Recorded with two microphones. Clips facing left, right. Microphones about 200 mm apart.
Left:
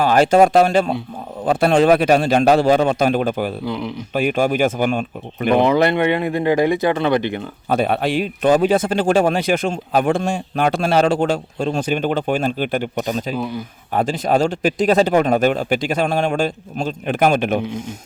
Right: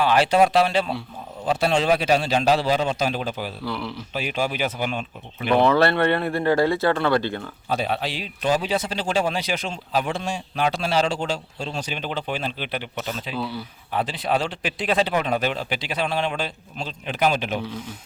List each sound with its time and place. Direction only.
0.0 s a man's voice: 45° left (ahead or behind)
3.7 s speech: 20° left (ahead or behind)
4.1 s a man's voice: 50° left (ahead or behind)
5.5 s speech: 15° left (ahead or behind)
7.7 s a man's voice: 55° left (ahead or behind)
13.3 s speech: 15° left (ahead or behind)
13.9 s a man's voice: 45° left (ahead or behind)